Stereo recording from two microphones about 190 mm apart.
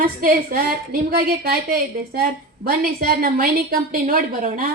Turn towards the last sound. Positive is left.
turn(degrees=-50)  # may be behind; listen again after turning